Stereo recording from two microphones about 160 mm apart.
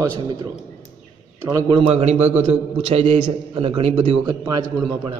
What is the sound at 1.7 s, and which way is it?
A man's voice, 40° right (ahead or behind).